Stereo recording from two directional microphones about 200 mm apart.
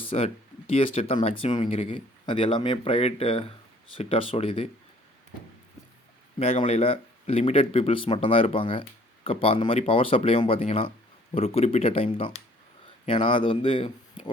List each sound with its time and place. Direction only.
0.0 s speech: 25° left (ahead or behind)
6.4 s speech: 30° left (ahead or behind)
13.1 s speech: 25° left (ahead or behind)